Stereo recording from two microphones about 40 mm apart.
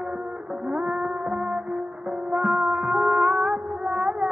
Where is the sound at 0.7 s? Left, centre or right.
Right.